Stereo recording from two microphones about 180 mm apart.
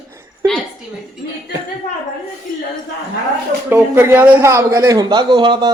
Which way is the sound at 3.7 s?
15° right (ahead or behind).